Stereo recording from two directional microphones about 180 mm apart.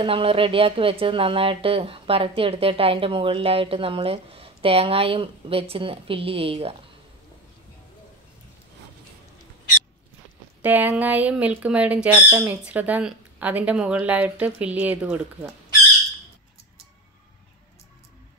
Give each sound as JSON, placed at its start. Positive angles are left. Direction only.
{"t": 0.0, "sound": "speech", "side_deg": -30}
{"t": 10.6, "sound": "a woman's voice", "side_deg": -10}